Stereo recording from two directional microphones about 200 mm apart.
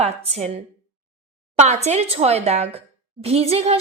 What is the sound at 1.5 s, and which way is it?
Speech, 35° right (ahead or behind).